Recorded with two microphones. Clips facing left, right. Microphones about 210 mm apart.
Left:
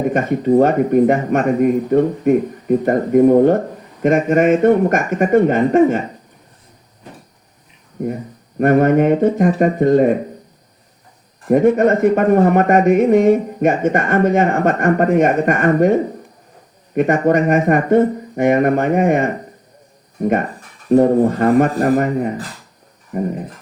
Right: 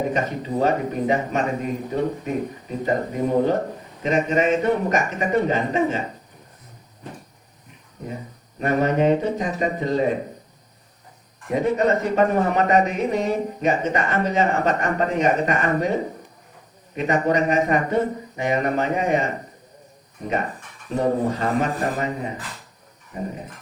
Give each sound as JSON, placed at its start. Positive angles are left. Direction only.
{"t": 0.1, "sound": "speech", "side_deg": 55}
{"t": 8.5, "sound": "speech", "side_deg": 55}
{"t": 11.4, "sound": "speech", "side_deg": 50}
{"t": 20.9, "sound": "speech", "side_deg": 55}